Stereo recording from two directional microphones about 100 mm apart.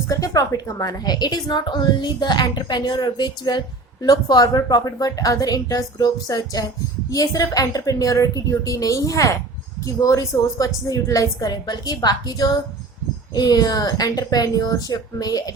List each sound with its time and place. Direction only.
0.1 s a woman's voice: 35° left (ahead or behind)